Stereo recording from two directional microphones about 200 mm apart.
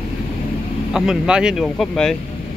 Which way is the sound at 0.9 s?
5° right (ahead or behind).